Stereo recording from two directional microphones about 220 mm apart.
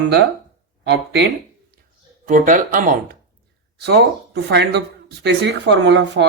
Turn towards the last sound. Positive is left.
turn(degrees=-55)  # may be behind; listen again after turning